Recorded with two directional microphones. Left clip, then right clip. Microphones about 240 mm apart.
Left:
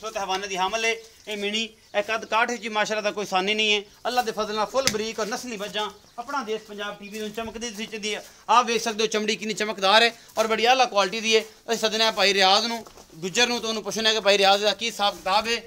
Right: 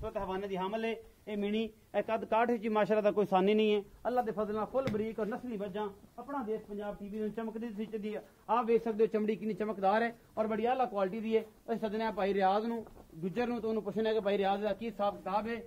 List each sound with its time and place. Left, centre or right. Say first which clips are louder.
0.4 s speech: left 10 dB; right
4.0 s speech: left 8 dB; centre
4.8 s speech: left 9 dB; centre
7.3 s speech: left 8 dB; left